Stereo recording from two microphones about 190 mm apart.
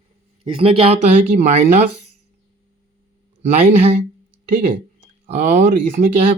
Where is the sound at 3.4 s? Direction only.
40° right (ahead or behind).